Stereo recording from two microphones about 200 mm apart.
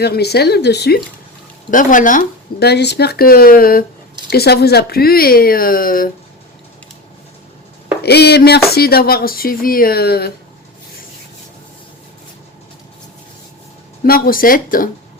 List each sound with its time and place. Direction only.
0.0 s speech: 55° left (ahead or behind)
1.7 s speech: 40° left (ahead or behind)
8.0 s speech: 55° left (ahead or behind)
14.0 s speech: 45° left (ahead or behind)